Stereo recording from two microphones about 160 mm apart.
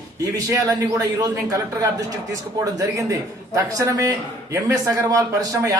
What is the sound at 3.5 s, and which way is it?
Speech, 20° right (ahead or behind).